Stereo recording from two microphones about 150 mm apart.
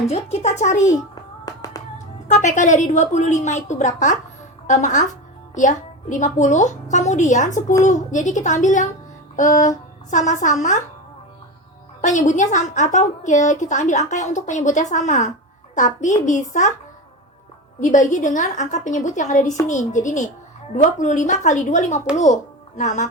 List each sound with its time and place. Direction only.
0.1 s a woman's voice: 50° left (ahead or behind)
0.9 s music: 25° left (ahead or behind)
2.2 s a woman's voice: 55° left (ahead or behind)
12.0 s a woman's voice: 55° left (ahead or behind)
17.7 s a woman's voice: 55° left (ahead or behind)